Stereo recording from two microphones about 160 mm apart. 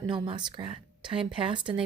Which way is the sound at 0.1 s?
30° right (ahead or behind).